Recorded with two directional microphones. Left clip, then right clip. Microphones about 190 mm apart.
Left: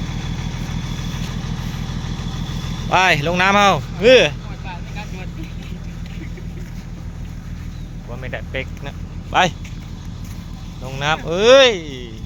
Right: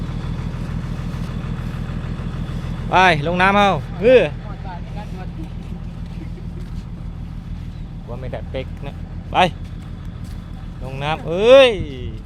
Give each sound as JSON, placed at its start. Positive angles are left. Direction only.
{"t": 0.0, "sound": "vehicle", "side_deg": 35}
{"t": 1.3, "sound": "vehicle", "side_deg": 20}
{"t": 2.9, "sound": "speech", "side_deg": -5}
{"t": 8.2, "sound": "speech", "side_deg": -5}
{"t": 10.8, "sound": "speech", "side_deg": 5}